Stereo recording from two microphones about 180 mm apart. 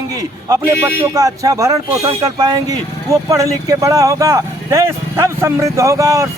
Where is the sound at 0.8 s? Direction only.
15° right (ahead or behind).